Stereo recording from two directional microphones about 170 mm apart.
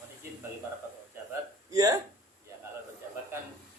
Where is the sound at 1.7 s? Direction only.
20° right (ahead or behind).